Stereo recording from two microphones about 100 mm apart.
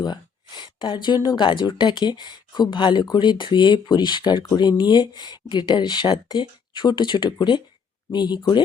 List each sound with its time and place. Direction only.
0.0 s speech: 45° left (ahead or behind)